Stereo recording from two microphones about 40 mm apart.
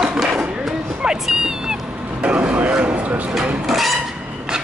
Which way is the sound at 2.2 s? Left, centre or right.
Right.